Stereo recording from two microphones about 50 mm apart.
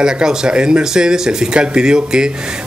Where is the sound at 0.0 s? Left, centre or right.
Centre.